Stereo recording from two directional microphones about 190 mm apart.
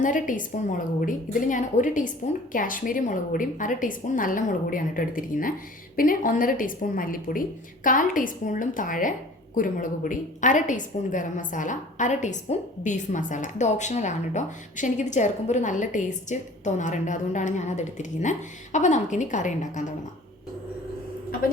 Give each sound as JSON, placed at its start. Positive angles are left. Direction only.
{"t": 0.0, "sound": "a woman's voice", "side_deg": 45}